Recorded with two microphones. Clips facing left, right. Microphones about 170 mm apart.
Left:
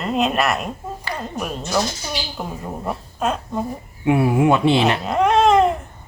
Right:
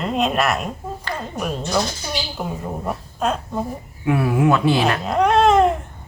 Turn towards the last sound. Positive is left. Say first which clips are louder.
# even
turn(degrees=0)  # may be behind; listen again after turning